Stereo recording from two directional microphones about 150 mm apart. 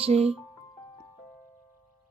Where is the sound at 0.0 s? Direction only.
45° right (ahead or behind).